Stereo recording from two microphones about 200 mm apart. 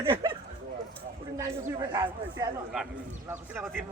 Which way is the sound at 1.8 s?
20° right (ahead or behind).